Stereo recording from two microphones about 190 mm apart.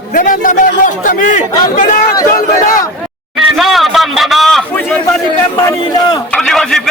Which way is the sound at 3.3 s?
Centre (ahead or behind).